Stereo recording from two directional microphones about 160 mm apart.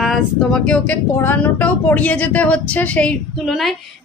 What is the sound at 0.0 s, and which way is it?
Speech, centre (ahead or behind).